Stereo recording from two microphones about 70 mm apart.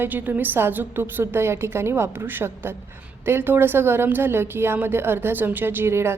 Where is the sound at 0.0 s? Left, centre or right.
Right.